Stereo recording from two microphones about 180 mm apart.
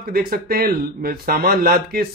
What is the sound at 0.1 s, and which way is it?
A man's voice, 55° right (ahead or behind).